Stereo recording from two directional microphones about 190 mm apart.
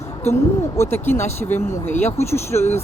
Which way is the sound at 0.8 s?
10° left (ahead or behind).